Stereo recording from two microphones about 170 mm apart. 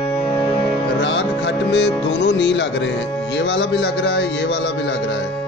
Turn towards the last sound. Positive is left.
turn(degrees=85)